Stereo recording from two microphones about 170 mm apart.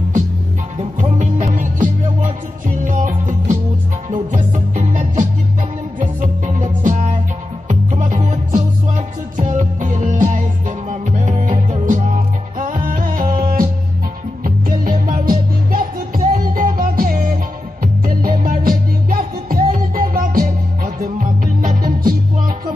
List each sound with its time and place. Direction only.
0.7 s music: 40° right (ahead or behind)